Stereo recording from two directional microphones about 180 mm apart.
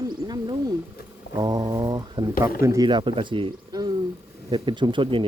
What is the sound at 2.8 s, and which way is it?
Speech, 25° right (ahead or behind).